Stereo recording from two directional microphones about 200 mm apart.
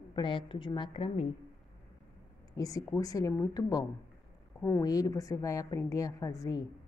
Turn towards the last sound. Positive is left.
turn(degrees=15)  # may be behind; listen again after turning